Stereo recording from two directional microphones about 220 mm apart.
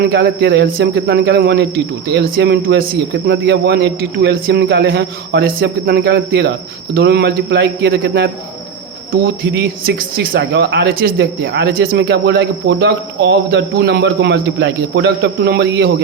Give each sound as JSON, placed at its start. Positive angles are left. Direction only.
{"t": 0.0, "sound": "speech", "side_deg": -45}